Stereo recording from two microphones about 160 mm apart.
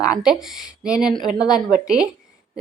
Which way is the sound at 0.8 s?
5° right (ahead or behind).